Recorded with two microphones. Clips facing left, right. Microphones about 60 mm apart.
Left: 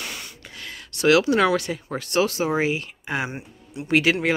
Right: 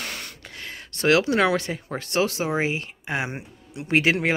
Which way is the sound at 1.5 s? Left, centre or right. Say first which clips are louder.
Left 1 dB; right.